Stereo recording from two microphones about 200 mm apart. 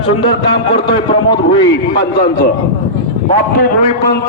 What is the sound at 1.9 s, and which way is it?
Speech, 55° left (ahead or behind).